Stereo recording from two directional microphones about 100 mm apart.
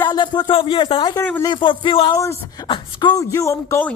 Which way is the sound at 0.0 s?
50° left (ahead or behind).